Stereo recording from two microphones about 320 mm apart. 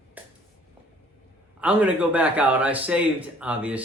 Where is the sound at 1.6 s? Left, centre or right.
Centre.